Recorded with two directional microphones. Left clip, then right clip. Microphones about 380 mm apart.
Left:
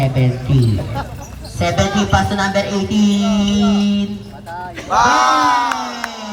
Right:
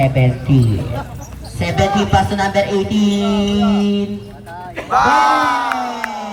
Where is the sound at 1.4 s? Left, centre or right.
Centre.